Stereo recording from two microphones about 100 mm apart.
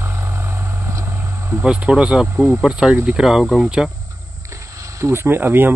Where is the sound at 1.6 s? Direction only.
10° right (ahead or behind).